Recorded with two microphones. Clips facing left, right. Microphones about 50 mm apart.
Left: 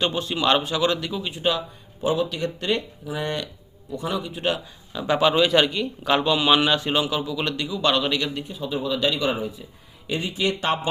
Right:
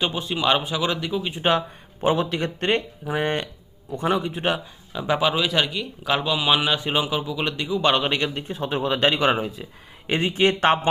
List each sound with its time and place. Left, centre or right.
0.0 s speech: centre
1.3 s speech: right
4.4 s speech: centre
8.4 s speech: right
10.1 s speech: right